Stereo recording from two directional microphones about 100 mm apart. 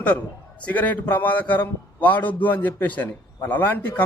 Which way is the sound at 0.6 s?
15° left (ahead or behind).